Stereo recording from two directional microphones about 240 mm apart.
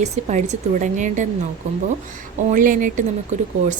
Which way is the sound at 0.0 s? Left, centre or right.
Right.